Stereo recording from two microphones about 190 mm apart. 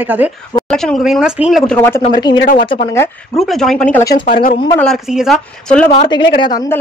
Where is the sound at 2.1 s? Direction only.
20° left (ahead or behind).